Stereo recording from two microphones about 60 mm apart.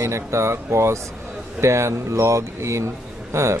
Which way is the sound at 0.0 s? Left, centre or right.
Right.